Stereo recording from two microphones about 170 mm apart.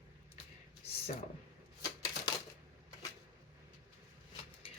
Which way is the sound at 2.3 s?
25° left (ahead or behind).